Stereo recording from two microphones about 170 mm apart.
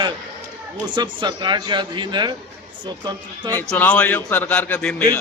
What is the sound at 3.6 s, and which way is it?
Speech, 10° left (ahead or behind).